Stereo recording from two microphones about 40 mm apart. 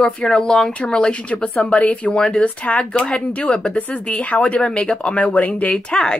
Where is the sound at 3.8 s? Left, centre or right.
Left.